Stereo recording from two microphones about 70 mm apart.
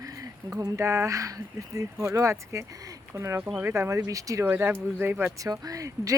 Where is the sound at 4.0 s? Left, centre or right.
Right.